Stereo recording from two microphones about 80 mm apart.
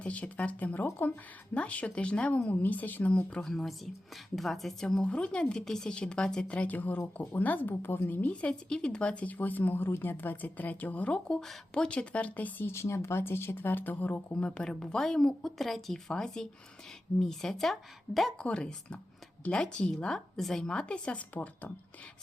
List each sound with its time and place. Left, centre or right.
0.0 s a woman's voice: centre
12.7 s a woman's voice: left
14.3 s a woman's voice: centre
18.4 s a woman's voice: centre